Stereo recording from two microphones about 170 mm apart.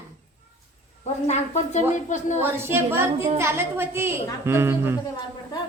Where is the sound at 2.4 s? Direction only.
15° right (ahead or behind).